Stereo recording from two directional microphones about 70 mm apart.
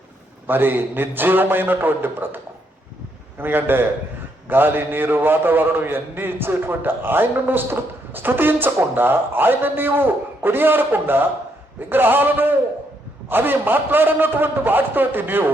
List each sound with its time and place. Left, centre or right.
0.4 s a man's voice: right